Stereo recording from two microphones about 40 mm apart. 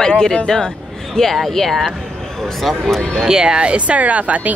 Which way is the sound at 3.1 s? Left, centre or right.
Centre.